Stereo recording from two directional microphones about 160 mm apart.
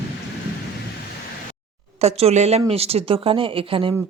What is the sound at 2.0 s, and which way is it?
Speech, 40° right (ahead or behind).